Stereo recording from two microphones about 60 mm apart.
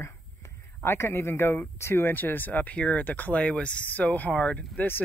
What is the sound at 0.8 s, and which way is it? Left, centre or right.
Speech, left.